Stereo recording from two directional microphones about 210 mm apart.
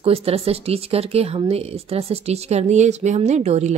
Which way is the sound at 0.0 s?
30° right (ahead or behind).